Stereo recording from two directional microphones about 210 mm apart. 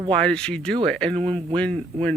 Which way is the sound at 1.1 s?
25° right (ahead or behind).